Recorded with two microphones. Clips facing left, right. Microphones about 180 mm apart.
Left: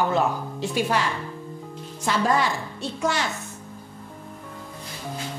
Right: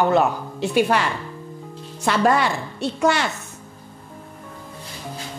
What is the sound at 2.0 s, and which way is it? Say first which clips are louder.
A woman's voice: right 4 dB; 65° right (ahead or behind).